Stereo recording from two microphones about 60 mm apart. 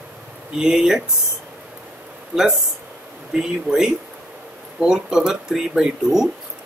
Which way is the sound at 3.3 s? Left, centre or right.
Centre.